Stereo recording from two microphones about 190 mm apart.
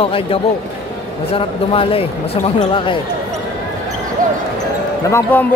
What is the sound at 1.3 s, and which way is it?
Speech, 30° left (ahead or behind).